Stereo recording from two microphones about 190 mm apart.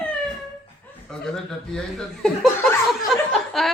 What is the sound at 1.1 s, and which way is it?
Speech, 5° left (ahead or behind).